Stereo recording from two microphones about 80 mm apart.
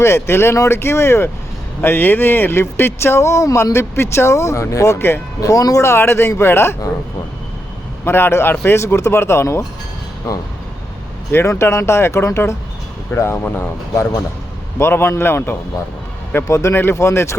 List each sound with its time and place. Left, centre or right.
0.0 s speech: left
5.4 s speech: left
8.0 s a man's voice: left
11.3 s speech: left
16.5 s speech: left